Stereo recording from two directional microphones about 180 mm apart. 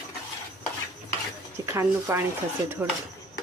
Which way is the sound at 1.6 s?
15° right (ahead or behind).